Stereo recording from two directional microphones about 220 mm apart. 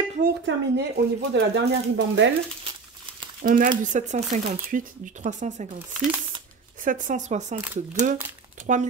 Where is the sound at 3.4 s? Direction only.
40° right (ahead or behind).